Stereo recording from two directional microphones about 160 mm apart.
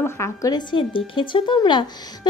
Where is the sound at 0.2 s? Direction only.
20° left (ahead or behind).